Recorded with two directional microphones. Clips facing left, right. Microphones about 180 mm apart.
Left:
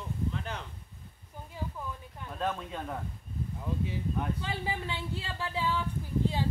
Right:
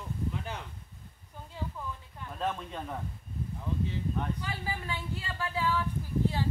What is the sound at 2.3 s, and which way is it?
Speech, centre (ahead or behind).